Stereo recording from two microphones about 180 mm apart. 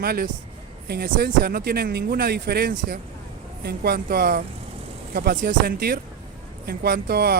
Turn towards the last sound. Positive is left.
turn(degrees=-60)  # may be behind; listen again after turning